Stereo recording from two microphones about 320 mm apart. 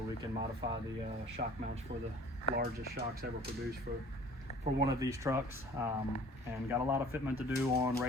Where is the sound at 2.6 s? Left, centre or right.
Right.